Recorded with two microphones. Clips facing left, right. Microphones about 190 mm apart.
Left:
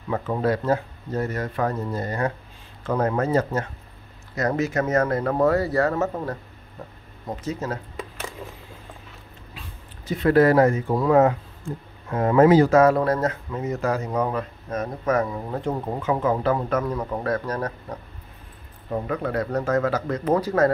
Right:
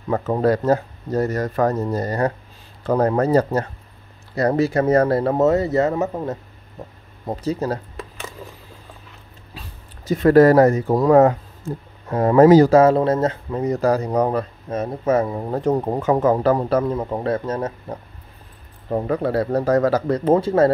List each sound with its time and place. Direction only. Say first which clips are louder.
0.1 s speech: right 5 dB; 40° right (ahead or behind); by 6.3 s 15° right (ahead or behind)
7.2 s speech: right 6 dB; 35° right (ahead or behind)
9.5 s speech: right 3 dB; 40° right (ahead or behind); by 17.9 s 25° right (ahead or behind)
18.9 s speech: right 5 dB; 35° right (ahead or behind)